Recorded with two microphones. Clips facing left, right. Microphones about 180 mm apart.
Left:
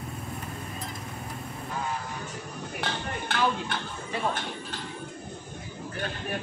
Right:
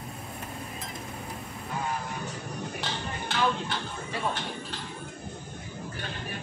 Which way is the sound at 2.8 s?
55° left (ahead or behind).